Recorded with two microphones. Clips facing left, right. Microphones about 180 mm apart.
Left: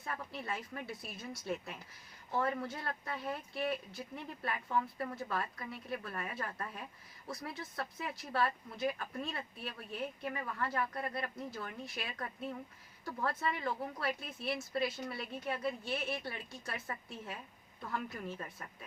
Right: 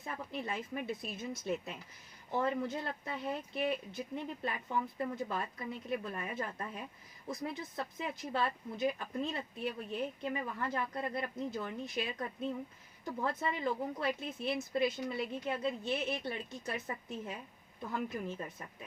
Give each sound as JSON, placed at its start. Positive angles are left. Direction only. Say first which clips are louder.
{"t": 0.0, "sound": "speech", "louder": "right 2 dB", "side_deg": -20}